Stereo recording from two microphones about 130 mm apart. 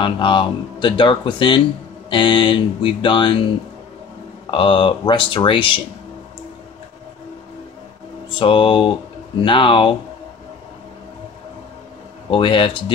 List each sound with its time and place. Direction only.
0.0 s speech: 40° left (ahead or behind)
4.5 s speech: 40° left (ahead or behind)
8.3 s speech: 40° left (ahead or behind)
12.3 s speech: 40° left (ahead or behind)